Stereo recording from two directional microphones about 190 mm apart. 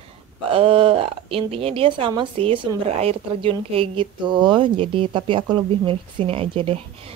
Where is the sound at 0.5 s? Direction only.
30° right (ahead or behind).